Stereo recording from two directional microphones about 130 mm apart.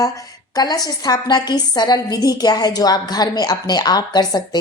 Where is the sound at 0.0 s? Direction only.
30° left (ahead or behind).